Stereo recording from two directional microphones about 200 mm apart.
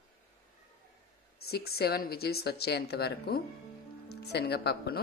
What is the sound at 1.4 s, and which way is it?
Speech, 50° left (ahead or behind).